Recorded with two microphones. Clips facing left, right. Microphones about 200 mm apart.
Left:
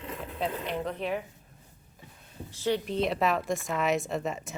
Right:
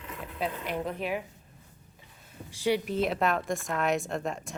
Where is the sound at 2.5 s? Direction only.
10° right (ahead or behind).